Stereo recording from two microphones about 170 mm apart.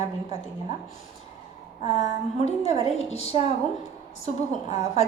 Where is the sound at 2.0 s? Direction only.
40° left (ahead or behind).